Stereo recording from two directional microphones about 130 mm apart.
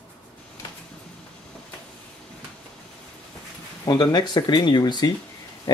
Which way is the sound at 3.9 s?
35° left (ahead or behind).